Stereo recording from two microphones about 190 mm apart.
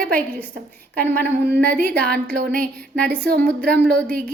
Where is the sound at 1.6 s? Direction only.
50° right (ahead or behind).